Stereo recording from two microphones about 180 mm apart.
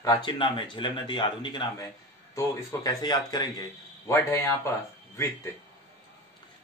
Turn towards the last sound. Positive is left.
turn(degrees=15)  # may be behind; listen again after turning